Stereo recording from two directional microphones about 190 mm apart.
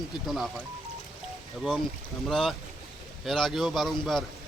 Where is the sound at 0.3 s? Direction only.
Centre (ahead or behind).